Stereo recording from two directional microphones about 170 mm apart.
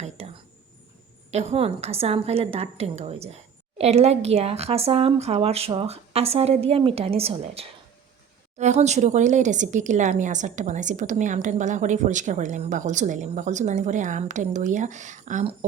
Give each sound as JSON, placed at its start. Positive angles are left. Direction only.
{"t": 0.2, "sound": "whispering", "side_deg": -40}
{"t": 1.3, "sound": "a woman's voice", "side_deg": -40}